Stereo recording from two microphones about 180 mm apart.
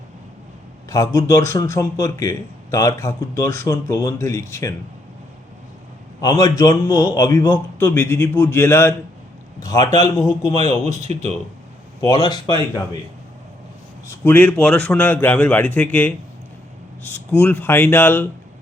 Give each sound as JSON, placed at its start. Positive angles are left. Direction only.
{"t": 1.1, "sound": "a man's voice", "side_deg": 15}
{"t": 6.4, "sound": "a man's voice", "side_deg": 20}
{"t": 11.1, "sound": "speech", "side_deg": -35}
{"t": 12.0, "sound": "a man's voice", "side_deg": 20}
{"t": 14.3, "sound": "a man's voice", "side_deg": 10}